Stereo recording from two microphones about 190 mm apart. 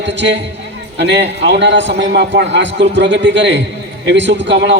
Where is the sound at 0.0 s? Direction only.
70° right (ahead or behind).